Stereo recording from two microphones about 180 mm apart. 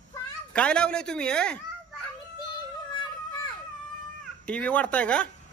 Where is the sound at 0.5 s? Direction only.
5° left (ahead or behind).